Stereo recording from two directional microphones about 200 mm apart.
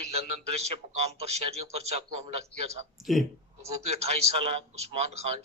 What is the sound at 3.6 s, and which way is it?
A man's voice, 30° right (ahead or behind).